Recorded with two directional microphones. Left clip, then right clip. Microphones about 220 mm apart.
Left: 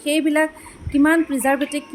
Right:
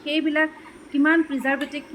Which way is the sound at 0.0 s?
45° left (ahead or behind).